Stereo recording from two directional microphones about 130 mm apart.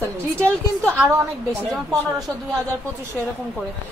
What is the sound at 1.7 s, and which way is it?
Speech, centre (ahead or behind).